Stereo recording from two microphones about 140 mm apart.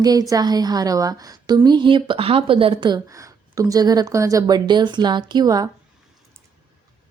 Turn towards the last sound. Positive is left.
turn(degrees=-25)  # may be behind; listen again after turning